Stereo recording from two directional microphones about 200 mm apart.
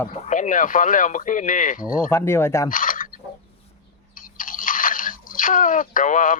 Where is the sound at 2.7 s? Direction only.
45° left (ahead or behind).